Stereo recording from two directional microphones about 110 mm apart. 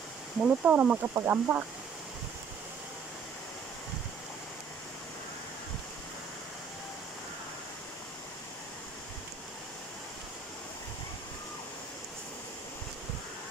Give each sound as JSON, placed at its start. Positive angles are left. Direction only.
{"t": 0.4, "sound": "speech", "side_deg": -10}